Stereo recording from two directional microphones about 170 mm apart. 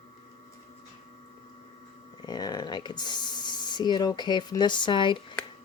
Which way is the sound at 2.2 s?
25° left (ahead or behind).